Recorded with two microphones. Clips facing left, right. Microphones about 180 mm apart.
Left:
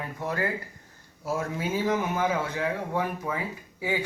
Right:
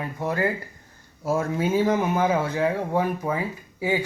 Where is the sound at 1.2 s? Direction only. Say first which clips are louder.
Right 6 dB; 45° right (ahead or behind).